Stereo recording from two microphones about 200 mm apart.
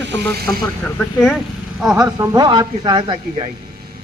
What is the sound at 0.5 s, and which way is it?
Speech, 15° left (ahead or behind).